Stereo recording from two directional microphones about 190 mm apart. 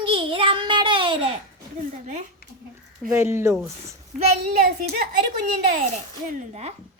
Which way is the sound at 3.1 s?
15° right (ahead or behind).